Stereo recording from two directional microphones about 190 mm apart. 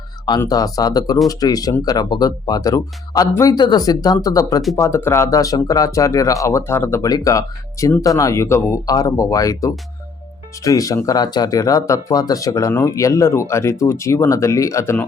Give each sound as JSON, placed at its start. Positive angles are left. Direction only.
{"t": 0.3, "sound": "speech", "side_deg": 20}